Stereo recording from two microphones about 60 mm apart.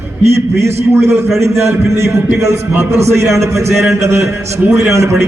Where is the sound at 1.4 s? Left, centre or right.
Right.